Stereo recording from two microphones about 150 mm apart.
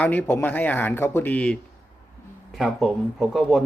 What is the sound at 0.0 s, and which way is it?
Speech, 10° left (ahead or behind).